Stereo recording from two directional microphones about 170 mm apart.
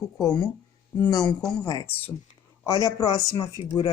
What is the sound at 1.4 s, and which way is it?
A woman's voice, 20° left (ahead or behind).